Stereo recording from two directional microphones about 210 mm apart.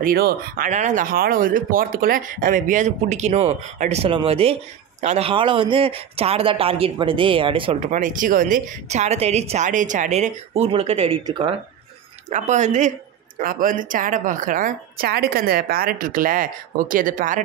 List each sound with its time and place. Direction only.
0.0 s a man's voice: 45° right (ahead or behind); by 7.7 s 25° right (ahead or behind)
7.9 s a man's voice: 40° right (ahead or behind); by 11.5 s 20° right (ahead or behind)
12.3 s speech: 35° right (ahead or behind)